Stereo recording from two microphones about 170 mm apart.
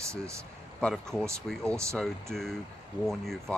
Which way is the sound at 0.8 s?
5° left (ahead or behind).